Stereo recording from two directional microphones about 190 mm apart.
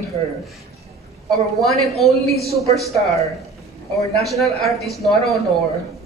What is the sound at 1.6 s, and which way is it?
Speech, centre (ahead or behind).